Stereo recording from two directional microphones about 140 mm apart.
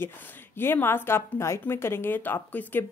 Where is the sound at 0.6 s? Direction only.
15° left (ahead or behind).